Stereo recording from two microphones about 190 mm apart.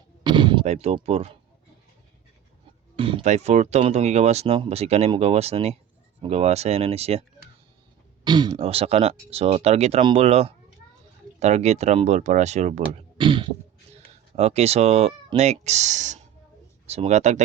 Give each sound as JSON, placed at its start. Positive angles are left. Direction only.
{"t": 0.3, "sound": "artillery fire", "side_deg": -25}
{"t": 0.6, "sound": "speech", "side_deg": -35}
{"t": 2.9, "sound": "speech", "side_deg": -30}
{"t": 13.1, "sound": "a sound", "side_deg": -25}
{"t": 14.3, "sound": "speech", "side_deg": -35}